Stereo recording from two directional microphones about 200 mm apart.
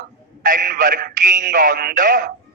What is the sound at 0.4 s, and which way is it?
Speech, 45° right (ahead or behind).